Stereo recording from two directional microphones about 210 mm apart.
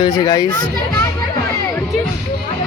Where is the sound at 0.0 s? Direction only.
20° left (ahead or behind).